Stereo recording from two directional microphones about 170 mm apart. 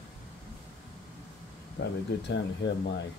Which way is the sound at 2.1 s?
75° left (ahead or behind).